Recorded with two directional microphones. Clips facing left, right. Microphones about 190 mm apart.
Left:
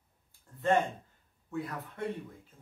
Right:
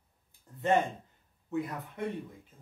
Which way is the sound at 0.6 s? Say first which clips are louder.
Even; 20° right (ahead or behind).